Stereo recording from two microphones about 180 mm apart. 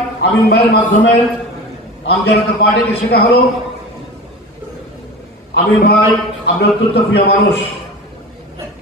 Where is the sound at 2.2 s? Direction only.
60° left (ahead or behind).